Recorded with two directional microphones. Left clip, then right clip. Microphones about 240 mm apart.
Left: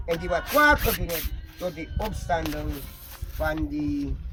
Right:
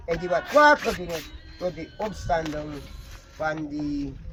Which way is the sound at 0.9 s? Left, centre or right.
Left.